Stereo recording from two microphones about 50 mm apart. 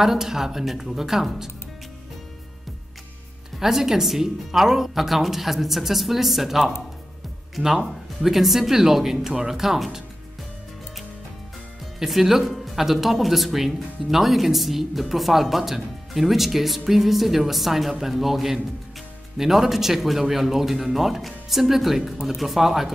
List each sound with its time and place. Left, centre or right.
0.0 s speech: centre
3.5 s speech: centre
12.0 s speech: centre